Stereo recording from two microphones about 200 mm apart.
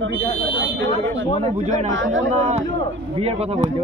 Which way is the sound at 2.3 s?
35° right (ahead or behind).